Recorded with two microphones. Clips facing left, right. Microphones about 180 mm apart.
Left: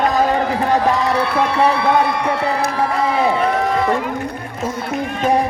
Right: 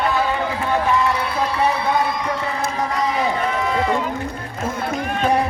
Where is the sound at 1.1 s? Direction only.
70° left (ahead or behind).